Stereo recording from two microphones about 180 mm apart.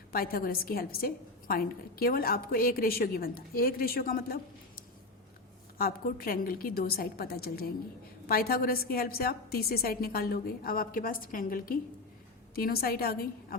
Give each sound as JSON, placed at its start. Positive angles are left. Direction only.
{"t": 0.1, "sound": "a woman's voice", "side_deg": 55}